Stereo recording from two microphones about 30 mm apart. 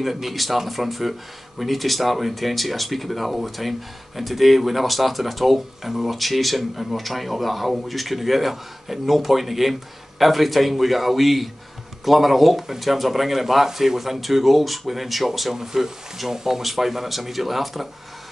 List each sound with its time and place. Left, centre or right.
0.0 s speech: centre
15.5 s speech: centre